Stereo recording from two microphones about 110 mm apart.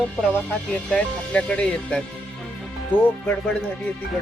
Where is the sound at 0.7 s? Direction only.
10° left (ahead or behind).